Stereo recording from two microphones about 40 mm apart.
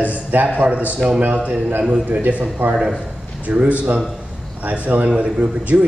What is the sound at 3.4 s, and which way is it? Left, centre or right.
A man's voice, right.